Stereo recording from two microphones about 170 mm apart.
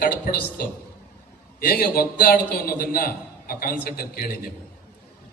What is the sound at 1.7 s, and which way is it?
A man's voice, 60° left (ahead or behind).